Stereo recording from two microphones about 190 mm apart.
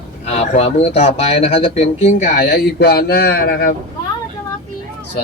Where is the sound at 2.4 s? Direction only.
55° left (ahead or behind).